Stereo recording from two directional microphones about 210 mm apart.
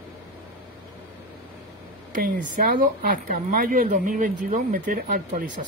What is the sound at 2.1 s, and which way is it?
Speech, 40° right (ahead or behind).